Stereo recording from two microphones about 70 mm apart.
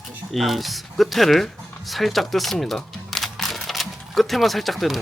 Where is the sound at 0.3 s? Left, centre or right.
Centre.